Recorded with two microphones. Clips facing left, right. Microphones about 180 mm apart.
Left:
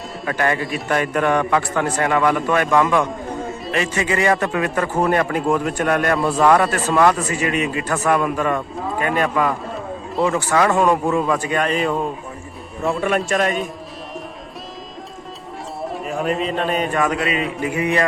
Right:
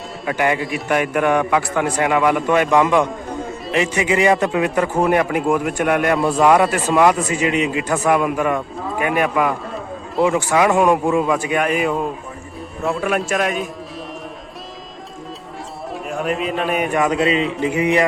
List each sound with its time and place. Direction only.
0.3 s a man's voice: 15° right (ahead or behind)
15.9 s speech: centre (ahead or behind); by 18.0 s 20° right (ahead or behind)